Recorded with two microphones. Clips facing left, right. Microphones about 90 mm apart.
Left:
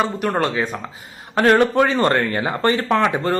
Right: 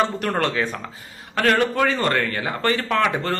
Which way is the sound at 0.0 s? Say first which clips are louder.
Left 1 dB; 5° left (ahead or behind).